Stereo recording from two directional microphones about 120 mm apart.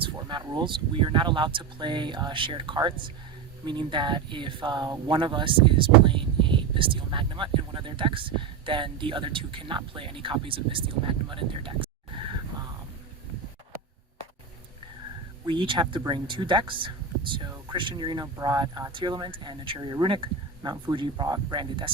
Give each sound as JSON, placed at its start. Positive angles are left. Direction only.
{"t": 0.2, "sound": "speech", "side_deg": -40}
{"t": 15.4, "sound": "speech", "side_deg": -45}